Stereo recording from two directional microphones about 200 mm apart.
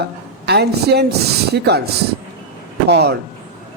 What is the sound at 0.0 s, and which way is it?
A woman's voice, 55° right (ahead or behind).